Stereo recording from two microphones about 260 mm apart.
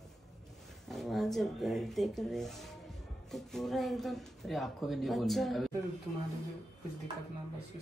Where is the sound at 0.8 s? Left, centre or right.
Centre.